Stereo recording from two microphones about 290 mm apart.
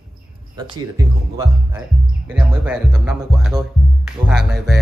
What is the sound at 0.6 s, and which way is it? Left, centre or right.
Speech, centre.